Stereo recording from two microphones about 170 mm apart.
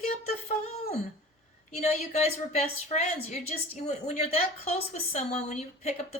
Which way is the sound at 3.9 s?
40° left (ahead or behind).